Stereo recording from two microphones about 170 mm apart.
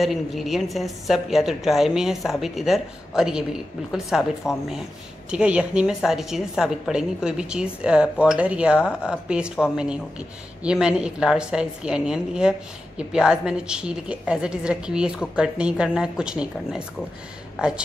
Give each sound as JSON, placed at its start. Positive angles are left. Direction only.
{"t": 0.0, "sound": "a woman's voice", "side_deg": 0}
{"t": 4.4, "sound": "speech", "side_deg": 15}
{"t": 5.3, "sound": "a woman's voice", "side_deg": -5}